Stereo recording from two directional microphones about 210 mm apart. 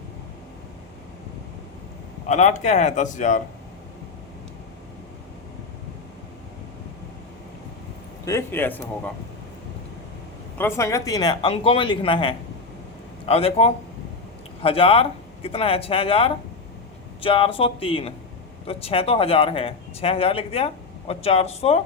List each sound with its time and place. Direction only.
2.2 s a man's voice: 35° left (ahead or behind)
8.2 s a man's voice: 15° left (ahead or behind)
10.6 s speech: 10° left (ahead or behind); by 21.8 s 30° left (ahead or behind)